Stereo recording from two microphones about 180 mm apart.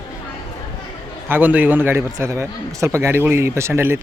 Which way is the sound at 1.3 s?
10° right (ahead or behind).